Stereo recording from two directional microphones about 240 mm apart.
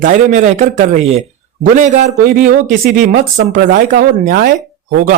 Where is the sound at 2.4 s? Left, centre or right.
Right.